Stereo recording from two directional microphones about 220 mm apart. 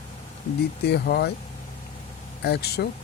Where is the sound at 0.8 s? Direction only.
45° left (ahead or behind).